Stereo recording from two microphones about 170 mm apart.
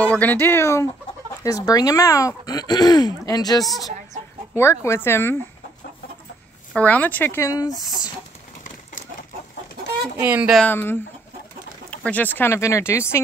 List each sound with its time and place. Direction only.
0.0 s speech: 10° left (ahead or behind)
3.6 s speech: centre (ahead or behind)
4.6 s speech: 15° left (ahead or behind)
6.7 s speech: 10° left (ahead or behind)
10.1 s speech: 10° right (ahead or behind)
10.6 s speech: 10° left (ahead or behind)
12.0 s speech: 10° left (ahead or behind)